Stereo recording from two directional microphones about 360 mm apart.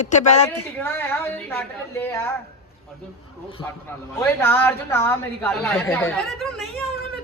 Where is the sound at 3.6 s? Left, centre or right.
Centre.